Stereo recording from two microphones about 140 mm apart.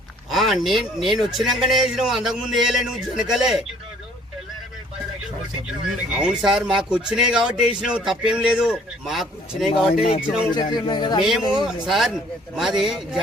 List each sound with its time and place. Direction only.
0.3 s a man's voice: centre (ahead or behind)
5.6 s a man's voice: 5° right (ahead or behind)
10.5 s a man's voice: 30° left (ahead or behind)
11.9 s a man's voice: centre (ahead or behind)